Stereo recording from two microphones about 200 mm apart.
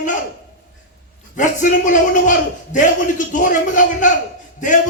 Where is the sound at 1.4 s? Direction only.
40° left (ahead or behind).